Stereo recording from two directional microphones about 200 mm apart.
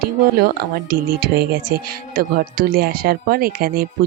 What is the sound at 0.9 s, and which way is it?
Speech, 50° right (ahead or behind).